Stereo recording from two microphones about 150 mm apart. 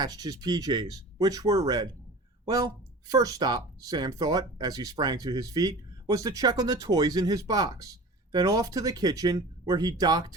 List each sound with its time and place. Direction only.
0.0 s speech: 25° right (ahead or behind)